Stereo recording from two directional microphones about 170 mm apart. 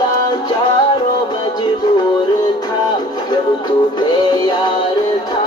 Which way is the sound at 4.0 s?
25° left (ahead or behind).